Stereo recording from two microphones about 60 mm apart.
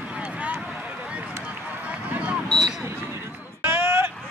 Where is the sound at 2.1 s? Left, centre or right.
Right.